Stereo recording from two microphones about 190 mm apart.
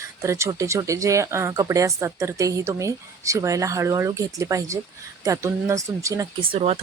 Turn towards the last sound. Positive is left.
turn(degrees=-30)  # may be behind; listen again after turning